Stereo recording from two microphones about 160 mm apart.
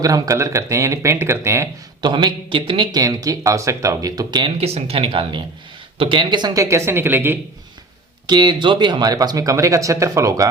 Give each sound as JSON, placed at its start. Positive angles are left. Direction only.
{"t": 0.0, "sound": "speech", "side_deg": -20}
{"t": 2.0, "sound": "speech", "side_deg": -30}
{"t": 4.5, "sound": "speech", "side_deg": -40}
{"t": 8.3, "sound": "speech", "side_deg": -30}